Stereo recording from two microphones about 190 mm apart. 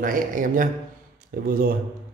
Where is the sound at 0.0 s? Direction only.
45° right (ahead or behind).